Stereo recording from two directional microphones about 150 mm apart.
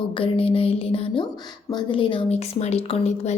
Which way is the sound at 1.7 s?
35° left (ahead or behind).